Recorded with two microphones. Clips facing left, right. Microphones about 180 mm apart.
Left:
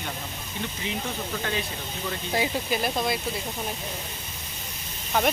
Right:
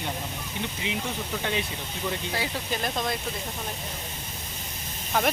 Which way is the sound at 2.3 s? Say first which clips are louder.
Left 4 dB; 15° left (ahead or behind).